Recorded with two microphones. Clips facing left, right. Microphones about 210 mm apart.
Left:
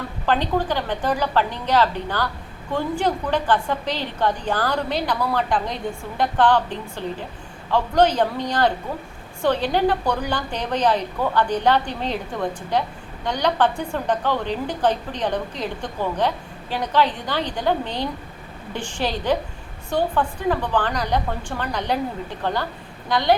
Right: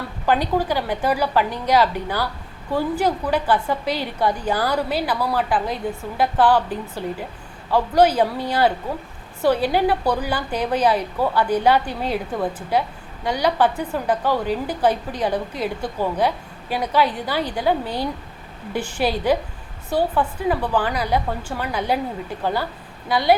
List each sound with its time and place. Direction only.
0.3 s a woman's voice: 10° right (ahead or behind)